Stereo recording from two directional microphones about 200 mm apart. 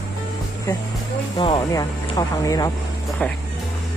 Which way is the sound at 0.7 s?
15° left (ahead or behind).